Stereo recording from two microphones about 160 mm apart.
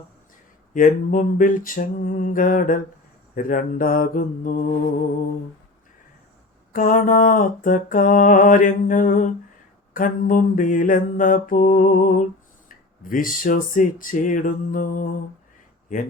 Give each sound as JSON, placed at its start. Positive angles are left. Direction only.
{"t": 0.7, "sound": "mantra", "side_deg": 55}
{"t": 6.7, "sound": "mantra", "side_deg": 60}